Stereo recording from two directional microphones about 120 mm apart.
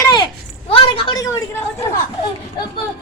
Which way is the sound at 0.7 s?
45° left (ahead or behind).